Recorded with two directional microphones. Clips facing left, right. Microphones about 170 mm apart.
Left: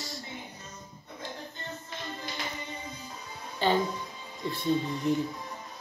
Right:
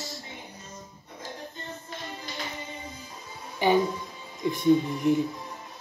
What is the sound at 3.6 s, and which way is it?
Speech, 15° right (ahead or behind).